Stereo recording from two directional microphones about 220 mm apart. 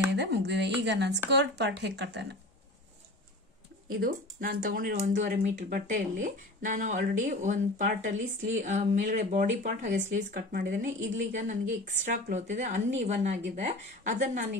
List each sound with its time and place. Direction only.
0.1 s a sound: 50° right (ahead or behind)
1.4 s speech: 50° right (ahead or behind)
3.9 s speech: 40° right (ahead or behind)